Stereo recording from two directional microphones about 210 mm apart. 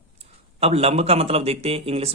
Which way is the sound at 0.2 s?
30° right (ahead or behind).